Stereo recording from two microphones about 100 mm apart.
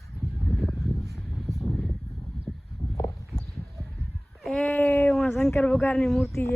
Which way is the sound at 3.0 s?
35° left (ahead or behind).